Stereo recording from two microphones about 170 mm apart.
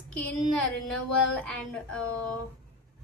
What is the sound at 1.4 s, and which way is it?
Music, 5° left (ahead or behind).